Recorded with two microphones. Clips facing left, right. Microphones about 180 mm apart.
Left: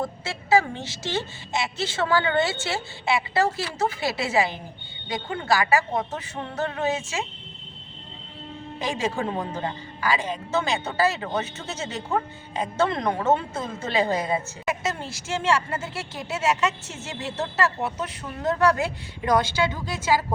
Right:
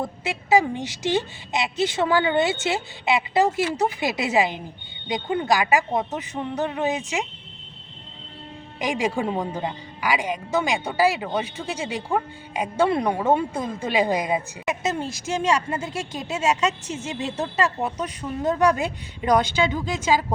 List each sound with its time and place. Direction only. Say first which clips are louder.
0.0 s a woman's voice: right 2 dB; 15° right (ahead or behind)
8.8 s a woman's voice: right 3 dB; 15° right (ahead or behind)